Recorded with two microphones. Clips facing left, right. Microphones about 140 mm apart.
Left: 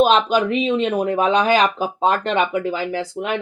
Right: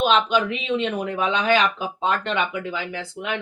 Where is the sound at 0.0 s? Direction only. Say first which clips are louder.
Left 4 dB; 40° left (ahead or behind).